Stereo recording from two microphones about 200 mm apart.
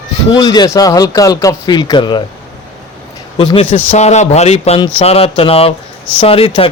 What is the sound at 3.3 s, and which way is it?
A man's voice, 25° left (ahead or behind).